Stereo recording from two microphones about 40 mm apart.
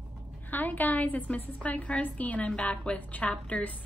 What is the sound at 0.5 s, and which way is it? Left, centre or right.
A woman's voice, left.